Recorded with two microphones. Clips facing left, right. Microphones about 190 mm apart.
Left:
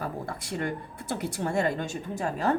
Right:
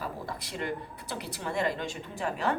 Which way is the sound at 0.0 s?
50° left (ahead or behind).